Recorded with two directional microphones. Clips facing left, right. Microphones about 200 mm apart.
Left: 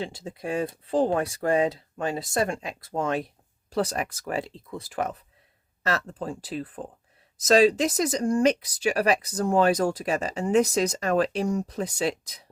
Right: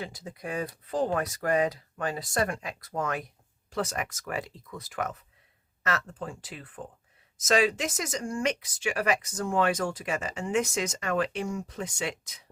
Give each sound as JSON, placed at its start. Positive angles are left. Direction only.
{"t": 0.0, "sound": "speech", "side_deg": 25}